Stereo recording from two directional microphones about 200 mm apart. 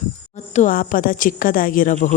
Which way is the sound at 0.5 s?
40° left (ahead or behind).